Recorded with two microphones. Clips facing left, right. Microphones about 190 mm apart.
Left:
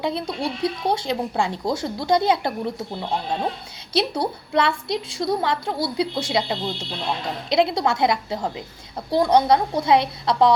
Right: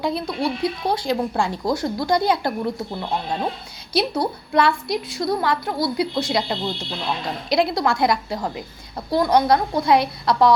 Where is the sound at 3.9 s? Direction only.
25° left (ahead or behind).